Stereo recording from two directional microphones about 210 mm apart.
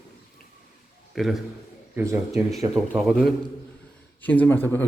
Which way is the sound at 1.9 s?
15° right (ahead or behind).